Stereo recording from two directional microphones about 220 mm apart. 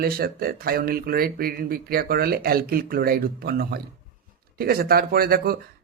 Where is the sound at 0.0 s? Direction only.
45° right (ahead or behind).